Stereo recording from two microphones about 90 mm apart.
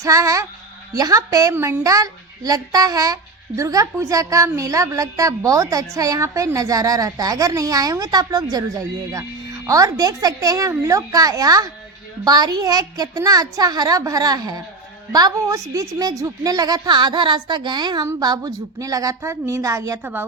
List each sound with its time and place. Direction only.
0.0 s speech: 35° right (ahead or behind)
1.5 s a woman's voice: 25° right (ahead or behind)
1.8 s a woman's voice: 40° right (ahead or behind)
20.0 s a woman's voice: 20° right (ahead or behind)